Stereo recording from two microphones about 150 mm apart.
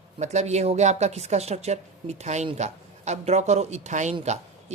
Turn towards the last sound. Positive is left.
turn(degrees=-45)  # may be behind; listen again after turning